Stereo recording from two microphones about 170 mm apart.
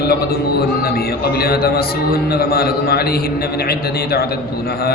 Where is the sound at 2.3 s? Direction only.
65° left (ahead or behind).